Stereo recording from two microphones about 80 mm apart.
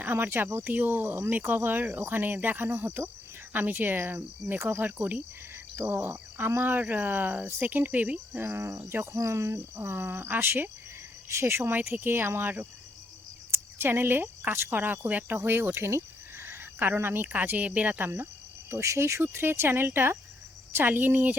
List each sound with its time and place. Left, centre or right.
0.0 s speech: right
8.4 s cricket: right
9.1 s speech: right
18.7 s speech: right